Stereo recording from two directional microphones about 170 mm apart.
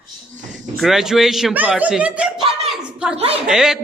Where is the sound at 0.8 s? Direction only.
Centre (ahead or behind).